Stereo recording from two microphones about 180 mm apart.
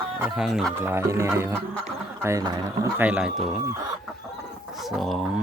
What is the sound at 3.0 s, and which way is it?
Speech, 5° right (ahead or behind).